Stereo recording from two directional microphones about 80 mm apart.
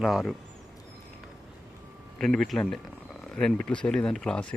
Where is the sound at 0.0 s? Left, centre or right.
Centre.